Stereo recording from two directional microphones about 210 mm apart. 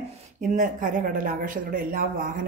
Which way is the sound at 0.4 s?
35° right (ahead or behind).